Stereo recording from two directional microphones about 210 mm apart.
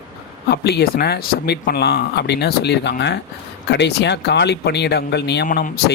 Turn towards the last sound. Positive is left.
turn(degrees=45)  # may be behind; listen again after turning